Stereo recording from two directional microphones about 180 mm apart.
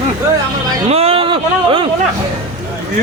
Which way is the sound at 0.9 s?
35° right (ahead or behind).